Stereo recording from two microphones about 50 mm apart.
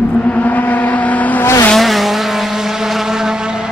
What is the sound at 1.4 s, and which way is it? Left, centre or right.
Vehicle, left.